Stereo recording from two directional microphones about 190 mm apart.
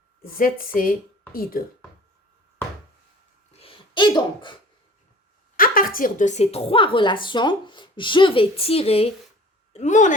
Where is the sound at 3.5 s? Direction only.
30° left (ahead or behind).